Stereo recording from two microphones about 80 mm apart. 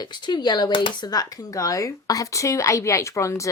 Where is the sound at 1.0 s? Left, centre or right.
Left.